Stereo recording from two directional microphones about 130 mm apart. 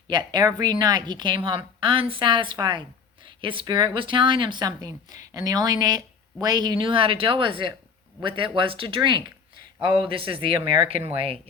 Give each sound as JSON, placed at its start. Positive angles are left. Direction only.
{"t": 0.1, "sound": "a woman's voice", "side_deg": -35}